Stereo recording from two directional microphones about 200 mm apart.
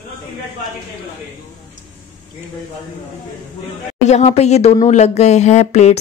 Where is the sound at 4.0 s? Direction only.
35° left (ahead or behind).